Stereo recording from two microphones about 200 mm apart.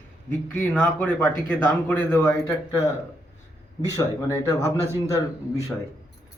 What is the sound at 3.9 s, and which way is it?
Speech, 15° left (ahead or behind).